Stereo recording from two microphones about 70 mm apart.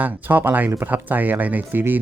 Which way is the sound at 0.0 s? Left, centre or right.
Right.